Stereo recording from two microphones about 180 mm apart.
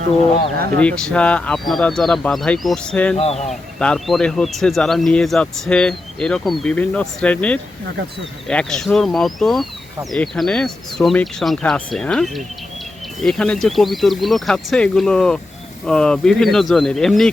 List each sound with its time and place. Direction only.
0.8 s speech: 5° left (ahead or behind)
3.2 s a man's voice: 35° left (ahead or behind)
3.5 s speech: 5° left (ahead or behind)